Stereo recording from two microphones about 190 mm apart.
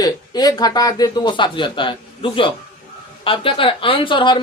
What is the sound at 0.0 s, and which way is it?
A woman's voice, 20° left (ahead or behind).